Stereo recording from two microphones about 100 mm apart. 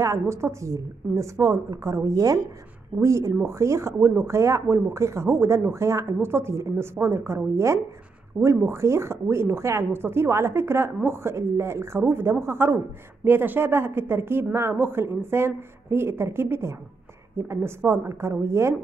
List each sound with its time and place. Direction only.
0.0 s a woman's voice: 30° right (ahead or behind)